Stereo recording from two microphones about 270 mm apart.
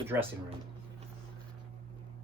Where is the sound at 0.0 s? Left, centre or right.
Centre.